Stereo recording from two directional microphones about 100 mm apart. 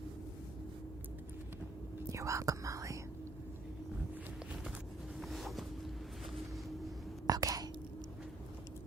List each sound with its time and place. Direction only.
2.0 s whispering: 30° right (ahead or behind)
5.2 s boat: centre (ahead or behind)
7.3 s whispering: 40° right (ahead or behind)